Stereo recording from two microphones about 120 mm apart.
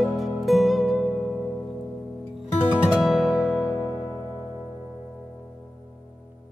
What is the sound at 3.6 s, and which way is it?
Music, 35° left (ahead or behind).